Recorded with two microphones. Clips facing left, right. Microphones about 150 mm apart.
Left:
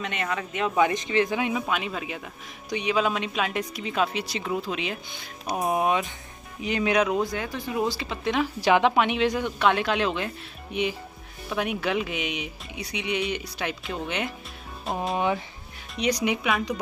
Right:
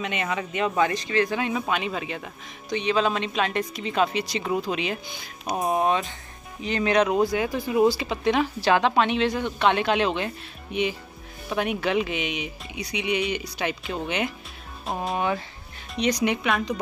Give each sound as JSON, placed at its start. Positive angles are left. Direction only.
{"t": 0.0, "sound": "speech", "side_deg": 0}
{"t": 0.7, "sound": "a woman's voice", "side_deg": 15}
{"t": 1.7, "sound": "a woman's voice", "side_deg": 0}
{"t": 7.2, "sound": "speech", "side_deg": -10}
{"t": 8.5, "sound": "a woman's voice", "side_deg": 15}
{"t": 15.1, "sound": "speech", "side_deg": 20}
{"t": 16.0, "sound": "a woman's voice", "side_deg": 5}